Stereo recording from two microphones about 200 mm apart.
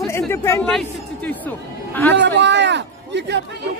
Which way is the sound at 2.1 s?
60° right (ahead or behind).